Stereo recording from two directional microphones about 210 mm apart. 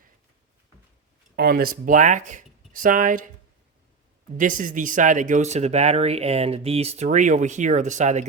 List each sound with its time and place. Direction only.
1.4 s speech: 45° right (ahead or behind)
4.4 s speech: 40° right (ahead or behind)